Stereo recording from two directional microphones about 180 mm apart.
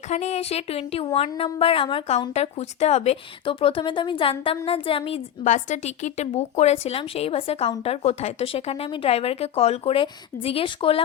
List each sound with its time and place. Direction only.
0.1 s a woman's voice: 40° left (ahead or behind)